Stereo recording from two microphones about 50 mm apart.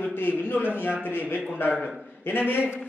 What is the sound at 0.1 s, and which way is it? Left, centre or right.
A man's voice, left.